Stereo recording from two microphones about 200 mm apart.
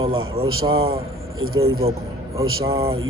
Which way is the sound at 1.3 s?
90° right.